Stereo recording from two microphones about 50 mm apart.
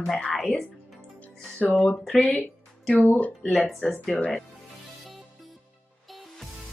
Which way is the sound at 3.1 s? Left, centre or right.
Left.